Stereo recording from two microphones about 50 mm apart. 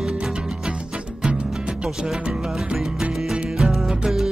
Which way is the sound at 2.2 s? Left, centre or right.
Centre.